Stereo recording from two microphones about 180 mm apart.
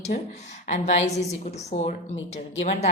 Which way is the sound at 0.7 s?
40° left (ahead or behind).